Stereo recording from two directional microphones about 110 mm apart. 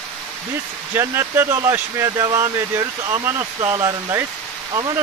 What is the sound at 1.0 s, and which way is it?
Speech, 25° right (ahead or behind).